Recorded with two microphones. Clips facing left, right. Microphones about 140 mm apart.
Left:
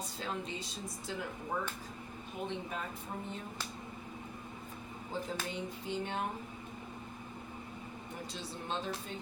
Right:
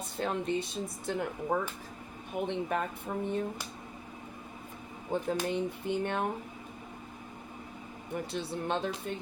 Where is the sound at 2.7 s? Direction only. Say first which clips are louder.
Right 9 dB; 65° right (ahead or behind).